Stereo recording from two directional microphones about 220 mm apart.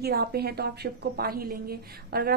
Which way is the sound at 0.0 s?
45° right (ahead or behind).